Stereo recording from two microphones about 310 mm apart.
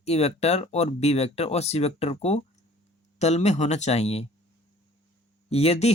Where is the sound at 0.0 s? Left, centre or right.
Centre.